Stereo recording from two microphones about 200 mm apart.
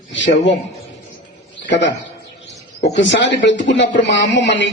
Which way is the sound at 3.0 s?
60° left (ahead or behind).